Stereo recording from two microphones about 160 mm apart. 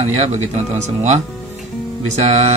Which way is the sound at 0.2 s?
45° right (ahead or behind).